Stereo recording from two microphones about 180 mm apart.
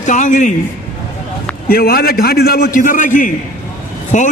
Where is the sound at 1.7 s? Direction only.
55° left (ahead or behind).